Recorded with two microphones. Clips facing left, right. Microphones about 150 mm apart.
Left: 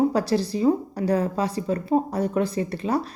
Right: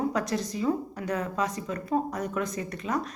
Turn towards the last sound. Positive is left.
turn(degrees=30)  # may be behind; listen again after turning